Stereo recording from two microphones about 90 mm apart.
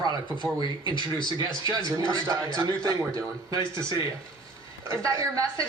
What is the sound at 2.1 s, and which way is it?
A man's voice, 40° right (ahead or behind).